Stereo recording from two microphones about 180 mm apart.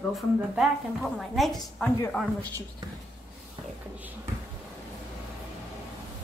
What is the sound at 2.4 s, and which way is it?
Speech, 20° right (ahead or behind).